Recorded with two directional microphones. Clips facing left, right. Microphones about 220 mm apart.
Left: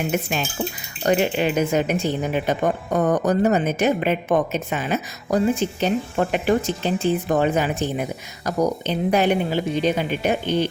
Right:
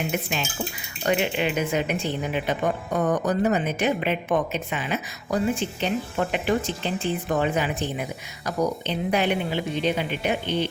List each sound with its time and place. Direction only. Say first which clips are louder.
0.1 s speech: left 4 dB; 45° left (ahead or behind)